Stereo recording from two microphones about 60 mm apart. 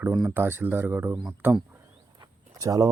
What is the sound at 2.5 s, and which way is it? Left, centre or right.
Speech, right.